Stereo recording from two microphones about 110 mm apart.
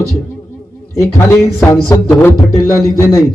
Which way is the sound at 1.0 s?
30° left (ahead or behind).